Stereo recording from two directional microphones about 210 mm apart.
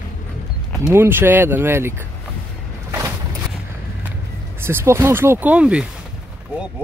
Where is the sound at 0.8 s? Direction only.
10° right (ahead or behind).